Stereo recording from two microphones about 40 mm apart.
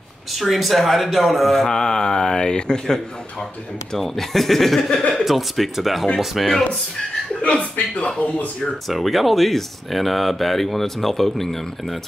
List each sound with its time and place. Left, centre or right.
0.3 s speech: centre
4.0 s speech: centre
7.4 s speech: left
8.8 s speech: centre